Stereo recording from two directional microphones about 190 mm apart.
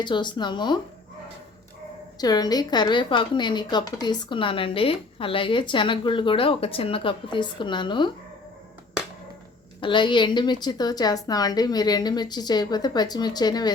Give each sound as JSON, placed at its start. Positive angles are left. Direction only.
{"t": 0.0, "sound": "speech", "side_deg": 25}
{"t": 2.1, "sound": "speech", "side_deg": 20}
{"t": 9.8, "sound": "speech", "side_deg": 25}